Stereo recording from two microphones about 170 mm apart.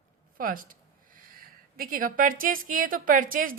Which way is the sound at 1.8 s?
55° right (ahead or behind).